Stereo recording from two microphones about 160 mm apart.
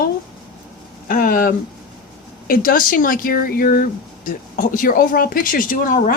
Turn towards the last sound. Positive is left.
turn(degrees=60)  # may be behind; listen again after turning